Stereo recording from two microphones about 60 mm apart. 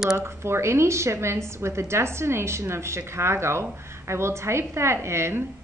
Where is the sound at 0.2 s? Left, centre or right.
Right.